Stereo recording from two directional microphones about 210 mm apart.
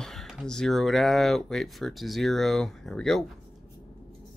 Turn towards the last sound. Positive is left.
turn(degrees=0)  # may be behind; listen again after turning